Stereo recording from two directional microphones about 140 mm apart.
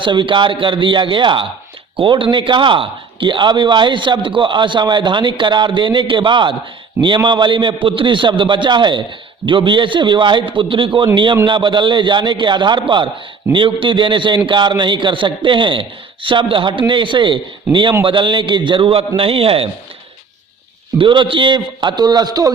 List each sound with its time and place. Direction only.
0.0 s a man's voice: 35° right (ahead or behind)
21.0 s a man's voice: 35° right (ahead or behind)